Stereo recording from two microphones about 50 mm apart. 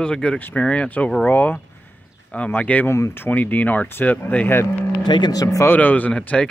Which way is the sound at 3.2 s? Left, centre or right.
Left.